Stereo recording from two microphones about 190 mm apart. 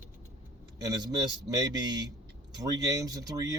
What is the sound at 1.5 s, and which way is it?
Speech, 20° right (ahead or behind).